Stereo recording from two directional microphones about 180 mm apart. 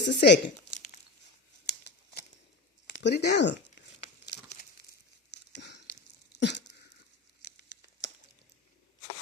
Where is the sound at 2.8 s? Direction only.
75° left (ahead or behind).